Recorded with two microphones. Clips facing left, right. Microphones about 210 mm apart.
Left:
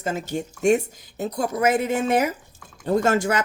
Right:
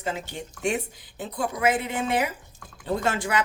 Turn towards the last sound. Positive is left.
turn(degrees=45)  # may be behind; listen again after turning